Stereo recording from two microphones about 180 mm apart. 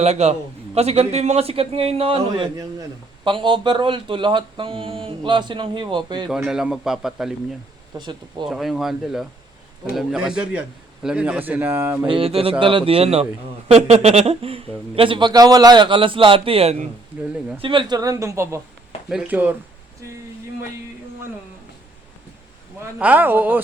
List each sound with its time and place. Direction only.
0.0 s a man's voice: 35° right (ahead or behind)
6.2 s a man's voice: centre (ahead or behind)
7.9 s speech: 25° right (ahead or behind)
8.4 s a man's voice: centre (ahead or behind)
12.0 s a man's voice: 30° right (ahead or behind)
17.2 s a man's voice: 5° right (ahead or behind)
17.6 s speech: 30° right (ahead or behind); by 19.5 s 10° right (ahead or behind)
22.8 s speech: 10° right (ahead or behind)